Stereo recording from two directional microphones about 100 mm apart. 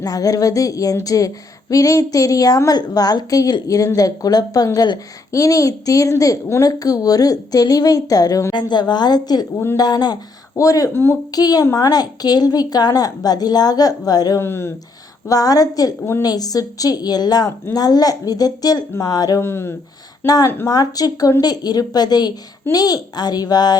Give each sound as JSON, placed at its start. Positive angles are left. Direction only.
{"t": 0.0, "sound": "a woman's voice", "side_deg": 35}
{"t": 8.5, "sound": "a woman's voice", "side_deg": 45}
{"t": 10.9, "sound": "speech", "side_deg": 20}
{"t": 11.3, "sound": "a woman's voice", "side_deg": 40}
{"t": 14.3, "sound": "speech", "side_deg": 25}
{"t": 15.3, "sound": "a woman's voice", "side_deg": 40}
{"t": 16.0, "sound": "speech", "side_deg": 25}
{"t": 16.2, "sound": "a woman's voice", "side_deg": 40}
{"t": 19.4, "sound": "speech", "side_deg": 25}
{"t": 20.2, "sound": "a woman's voice", "side_deg": 35}